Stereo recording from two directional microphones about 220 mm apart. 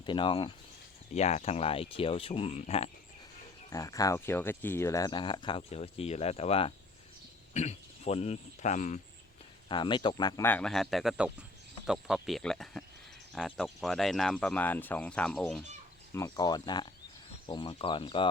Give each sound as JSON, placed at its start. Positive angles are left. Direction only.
{"t": 0.0, "sound": "speech", "side_deg": 20}
{"t": 3.7, "sound": "speech", "side_deg": 15}
{"t": 9.6, "sound": "speech", "side_deg": 20}
{"t": 16.1, "sound": "speech", "side_deg": 15}